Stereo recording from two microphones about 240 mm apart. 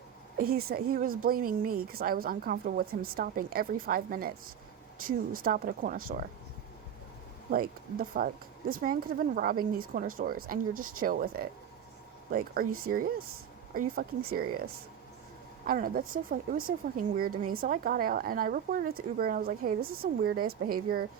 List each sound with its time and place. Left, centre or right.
0.3 s speech: right
7.5 s speech: right
15.6 s speech: right